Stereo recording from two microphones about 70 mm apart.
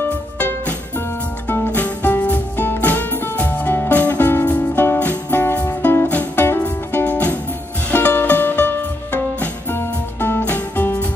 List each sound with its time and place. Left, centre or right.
0.0 s music: left